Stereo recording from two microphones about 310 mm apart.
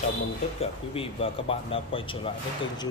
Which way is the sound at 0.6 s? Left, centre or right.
Centre.